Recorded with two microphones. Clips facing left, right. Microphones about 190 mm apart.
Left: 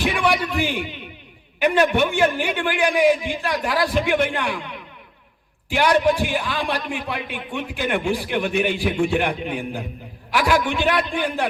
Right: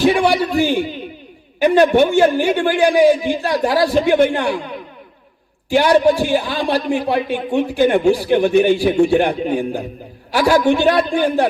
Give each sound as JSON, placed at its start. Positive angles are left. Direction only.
{"t": 0.0, "sound": "a man's voice", "side_deg": -35}